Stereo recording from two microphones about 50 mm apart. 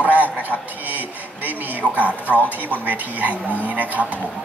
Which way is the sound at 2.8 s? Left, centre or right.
Right.